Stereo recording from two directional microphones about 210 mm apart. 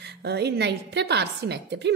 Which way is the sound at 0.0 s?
50° right (ahead or behind).